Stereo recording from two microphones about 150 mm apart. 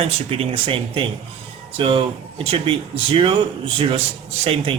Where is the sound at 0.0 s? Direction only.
40° right (ahead or behind).